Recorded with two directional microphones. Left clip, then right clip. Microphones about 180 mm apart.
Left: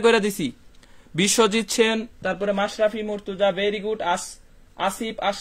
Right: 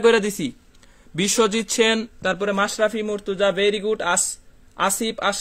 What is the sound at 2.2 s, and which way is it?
A man's voice, 50° right (ahead or behind).